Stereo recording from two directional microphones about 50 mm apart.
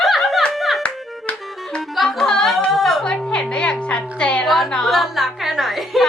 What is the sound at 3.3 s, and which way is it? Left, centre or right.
Music, centre.